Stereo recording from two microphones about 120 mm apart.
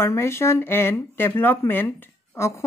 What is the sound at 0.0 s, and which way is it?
Speech, 20° left (ahead or behind).